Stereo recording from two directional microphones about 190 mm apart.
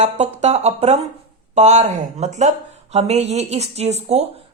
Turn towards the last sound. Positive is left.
turn(degrees=-35)  # may be behind; listen again after turning